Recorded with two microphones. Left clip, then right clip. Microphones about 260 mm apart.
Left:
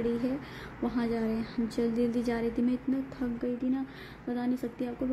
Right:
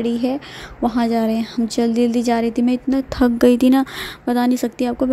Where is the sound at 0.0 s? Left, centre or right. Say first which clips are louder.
Right 10 dB; right.